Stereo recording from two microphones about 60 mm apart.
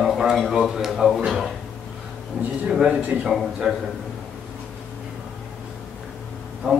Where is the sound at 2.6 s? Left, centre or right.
Centre.